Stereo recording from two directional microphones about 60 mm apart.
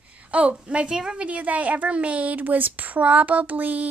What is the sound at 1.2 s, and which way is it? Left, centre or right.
Speech, right.